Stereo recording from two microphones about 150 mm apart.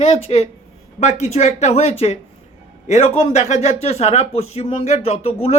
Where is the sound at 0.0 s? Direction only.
45° left (ahead or behind).